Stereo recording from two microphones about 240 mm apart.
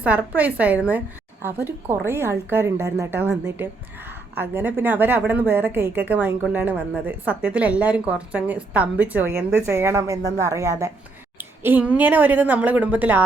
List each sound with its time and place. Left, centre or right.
0.0 s a woman's voice: centre